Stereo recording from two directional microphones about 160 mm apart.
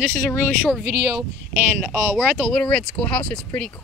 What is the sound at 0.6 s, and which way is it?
Speech, centre (ahead or behind).